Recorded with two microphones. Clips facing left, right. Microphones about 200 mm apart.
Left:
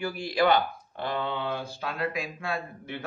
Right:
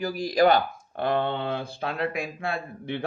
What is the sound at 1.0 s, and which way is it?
Speech, 55° right (ahead or behind).